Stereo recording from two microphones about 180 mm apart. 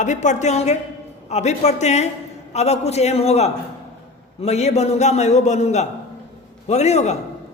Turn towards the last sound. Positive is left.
turn(degrees=40)  # may be behind; listen again after turning